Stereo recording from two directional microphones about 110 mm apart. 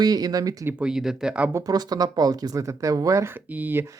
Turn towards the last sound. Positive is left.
turn(degrees=-20)  # may be behind; listen again after turning